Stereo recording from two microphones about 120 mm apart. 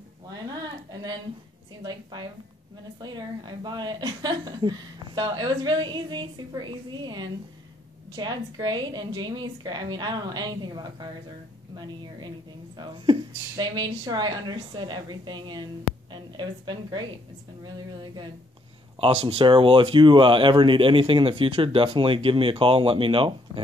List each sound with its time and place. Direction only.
0.3 s a sound: 35° right (ahead or behind)
1.8 s a woman's voice: 40° right (ahead or behind)
18.9 s speech: 45° right (ahead or behind)